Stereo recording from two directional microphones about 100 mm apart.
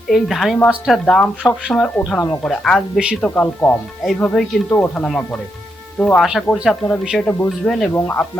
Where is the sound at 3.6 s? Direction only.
35° left (ahead or behind).